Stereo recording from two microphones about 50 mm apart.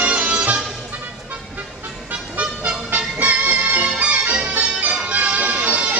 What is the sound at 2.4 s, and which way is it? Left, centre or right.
Music, right.